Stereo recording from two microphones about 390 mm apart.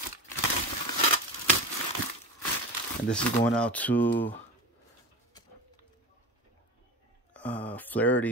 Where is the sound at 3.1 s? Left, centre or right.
Centre.